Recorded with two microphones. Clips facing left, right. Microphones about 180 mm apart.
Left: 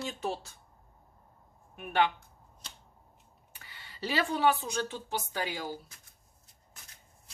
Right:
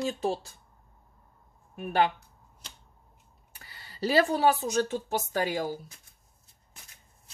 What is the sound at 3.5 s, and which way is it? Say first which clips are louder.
Speech: right 2 dB; 40° right (ahead or behind).